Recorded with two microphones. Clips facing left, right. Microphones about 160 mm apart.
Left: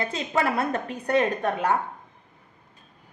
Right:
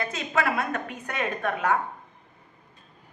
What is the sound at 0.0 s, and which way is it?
A woman's voice, 30° left (ahead or behind).